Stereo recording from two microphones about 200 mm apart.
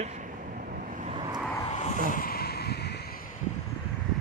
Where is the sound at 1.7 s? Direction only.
35° left (ahead or behind); by 2.9 s 55° left (ahead or behind).